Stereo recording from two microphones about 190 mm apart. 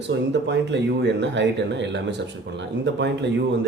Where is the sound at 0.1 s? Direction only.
70° right (ahead or behind).